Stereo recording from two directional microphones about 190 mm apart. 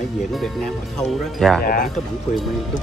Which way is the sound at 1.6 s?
50° left (ahead or behind).